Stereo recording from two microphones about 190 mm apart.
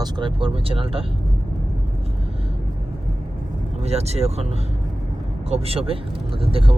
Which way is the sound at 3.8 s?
35° right (ahead or behind).